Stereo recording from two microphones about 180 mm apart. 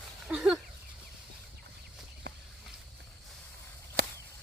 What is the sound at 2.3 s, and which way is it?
Walk, 75° right (ahead or behind).